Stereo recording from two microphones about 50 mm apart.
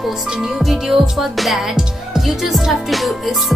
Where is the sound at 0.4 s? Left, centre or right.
Centre.